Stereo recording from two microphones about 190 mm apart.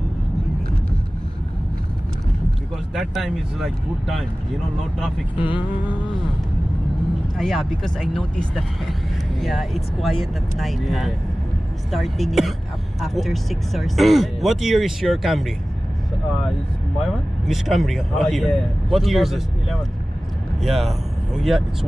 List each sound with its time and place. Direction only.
2.9 s speech: centre (ahead or behind)
5.4 s vehicle: 25° left (ahead or behind)
7.3 s speech: centre (ahead or behind)
17.0 s speech: centre (ahead or behind)